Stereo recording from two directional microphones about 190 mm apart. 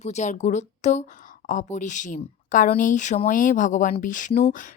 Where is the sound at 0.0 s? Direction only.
35° left (ahead or behind).